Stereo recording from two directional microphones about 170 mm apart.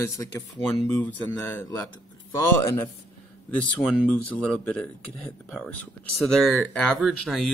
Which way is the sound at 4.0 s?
10° left (ahead or behind).